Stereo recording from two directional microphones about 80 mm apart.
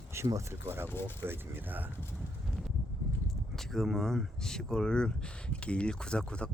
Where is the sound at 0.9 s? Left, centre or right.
Left.